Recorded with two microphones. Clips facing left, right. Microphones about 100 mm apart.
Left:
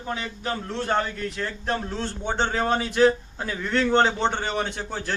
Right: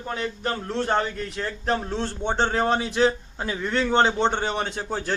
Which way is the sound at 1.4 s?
15° right (ahead or behind).